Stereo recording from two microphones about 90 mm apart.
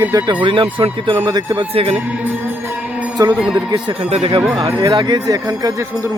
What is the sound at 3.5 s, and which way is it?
Speech, 55° right (ahead or behind).